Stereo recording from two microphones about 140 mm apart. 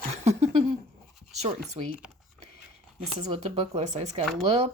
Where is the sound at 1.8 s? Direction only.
45° right (ahead or behind).